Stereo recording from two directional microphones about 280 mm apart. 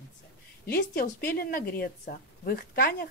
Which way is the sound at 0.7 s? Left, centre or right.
Left.